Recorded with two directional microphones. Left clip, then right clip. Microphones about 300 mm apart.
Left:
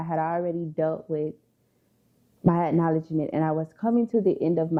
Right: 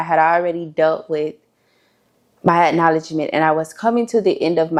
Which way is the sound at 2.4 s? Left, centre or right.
Centre.